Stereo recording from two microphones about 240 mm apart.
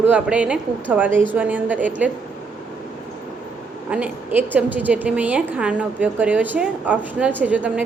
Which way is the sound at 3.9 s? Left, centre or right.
Centre.